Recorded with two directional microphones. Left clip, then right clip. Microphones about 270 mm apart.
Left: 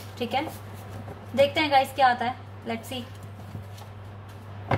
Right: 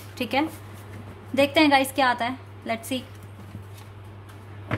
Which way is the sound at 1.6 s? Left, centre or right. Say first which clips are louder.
Right 2 dB; right.